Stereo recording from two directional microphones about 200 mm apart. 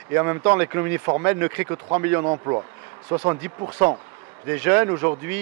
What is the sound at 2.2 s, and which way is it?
Speech, 20° right (ahead or behind).